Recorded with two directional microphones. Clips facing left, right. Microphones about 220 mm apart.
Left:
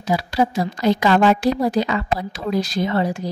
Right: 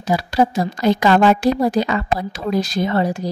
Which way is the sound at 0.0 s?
45° right (ahead or behind).